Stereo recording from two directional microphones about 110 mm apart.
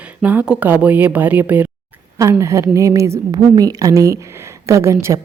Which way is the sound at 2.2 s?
30° right (ahead or behind).